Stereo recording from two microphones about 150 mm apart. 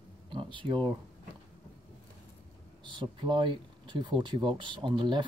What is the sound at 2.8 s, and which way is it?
Speech, 30° right (ahead or behind).